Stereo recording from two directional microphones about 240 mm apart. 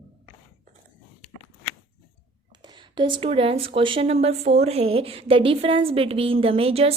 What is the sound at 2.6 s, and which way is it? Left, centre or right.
Speech, centre.